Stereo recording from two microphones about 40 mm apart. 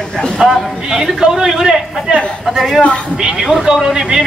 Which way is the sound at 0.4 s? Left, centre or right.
Centre.